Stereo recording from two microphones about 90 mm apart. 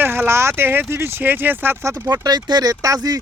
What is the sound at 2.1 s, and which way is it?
Speech, 50° right (ahead or behind).